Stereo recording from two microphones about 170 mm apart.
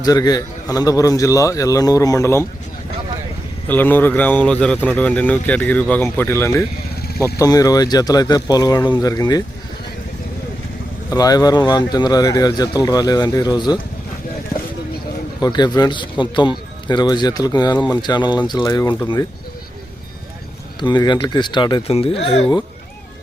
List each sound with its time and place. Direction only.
0.0 s speech: 20° left (ahead or behind)
3.7 s speech: 10° left (ahead or behind)
11.1 s speech: 20° left (ahead or behind)
15.4 s speech: 25° left (ahead or behind)
20.8 s speech: 25° left (ahead or behind)